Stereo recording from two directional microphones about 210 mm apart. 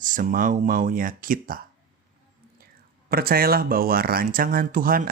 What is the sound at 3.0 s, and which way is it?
Speech, 45° right (ahead or behind).